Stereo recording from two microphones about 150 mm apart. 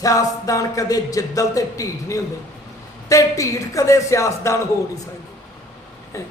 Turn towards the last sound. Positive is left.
turn(degrees=20)  # may be behind; listen again after turning